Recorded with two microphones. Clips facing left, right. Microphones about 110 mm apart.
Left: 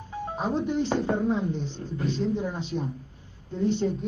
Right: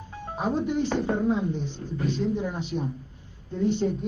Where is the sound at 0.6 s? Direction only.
10° right (ahead or behind).